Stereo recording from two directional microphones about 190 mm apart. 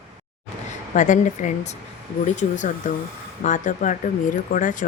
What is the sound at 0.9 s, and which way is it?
Speech, 40° left (ahead or behind).